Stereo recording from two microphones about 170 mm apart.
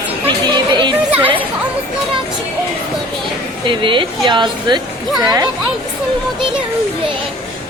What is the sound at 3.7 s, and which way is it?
Speech, 30° right (ahead or behind).